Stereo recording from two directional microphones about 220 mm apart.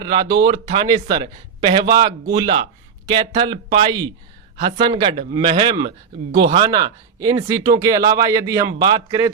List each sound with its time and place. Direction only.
0.0 s speech: 20° right (ahead or behind)